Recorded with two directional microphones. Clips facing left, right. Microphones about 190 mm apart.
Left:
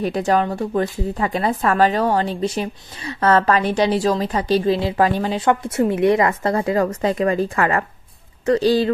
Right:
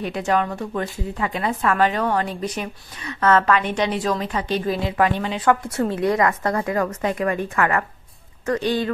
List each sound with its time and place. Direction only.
0.0 s speech: 35° left (ahead or behind)
5.5 s a woman's voice: 20° left (ahead or behind)